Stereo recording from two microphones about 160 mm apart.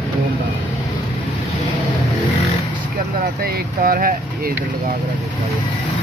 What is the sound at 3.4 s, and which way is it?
Speech, 60° right (ahead or behind).